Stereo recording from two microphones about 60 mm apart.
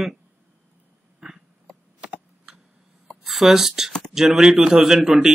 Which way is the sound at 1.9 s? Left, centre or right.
Centre.